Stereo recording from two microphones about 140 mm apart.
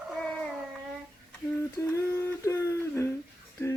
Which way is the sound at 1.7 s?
20° left (ahead or behind).